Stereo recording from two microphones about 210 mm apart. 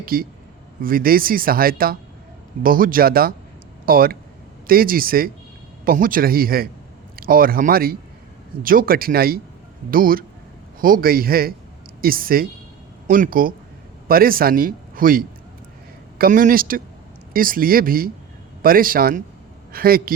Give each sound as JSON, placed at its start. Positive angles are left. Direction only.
{"t": 0.0, "sound": "speech", "side_deg": -45}